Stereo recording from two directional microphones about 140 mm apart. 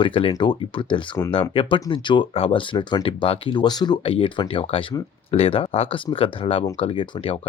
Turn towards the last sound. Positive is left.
turn(degrees=40)  # may be behind; listen again after turning